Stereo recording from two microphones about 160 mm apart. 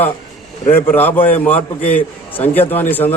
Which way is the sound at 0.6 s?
15° left (ahead or behind).